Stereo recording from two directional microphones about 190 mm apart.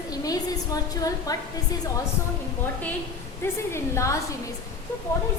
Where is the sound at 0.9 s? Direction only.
20° left (ahead or behind).